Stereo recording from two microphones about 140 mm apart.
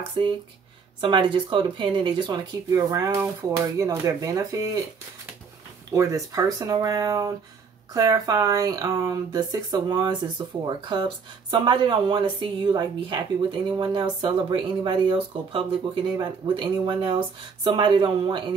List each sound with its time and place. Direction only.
0.2 s speech: 40° right (ahead or behind)
5.9 s speech: 25° right (ahead or behind)